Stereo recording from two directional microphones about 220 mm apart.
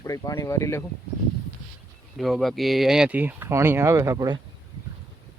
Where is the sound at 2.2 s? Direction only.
Centre (ahead or behind); by 4.4 s 15° right (ahead or behind).